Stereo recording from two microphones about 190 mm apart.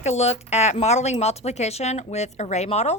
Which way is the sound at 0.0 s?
35° left (ahead or behind).